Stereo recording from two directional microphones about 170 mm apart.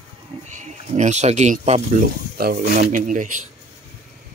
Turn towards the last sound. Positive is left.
turn(degrees=-50)  # may be behind; listen again after turning